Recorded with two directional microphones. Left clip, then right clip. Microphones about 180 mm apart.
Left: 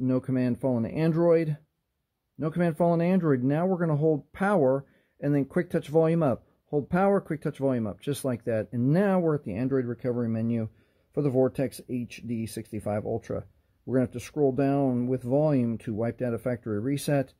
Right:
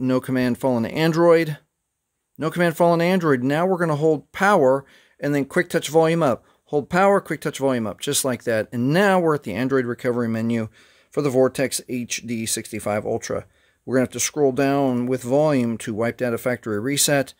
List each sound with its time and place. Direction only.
0.0 s speech: 25° right (ahead or behind)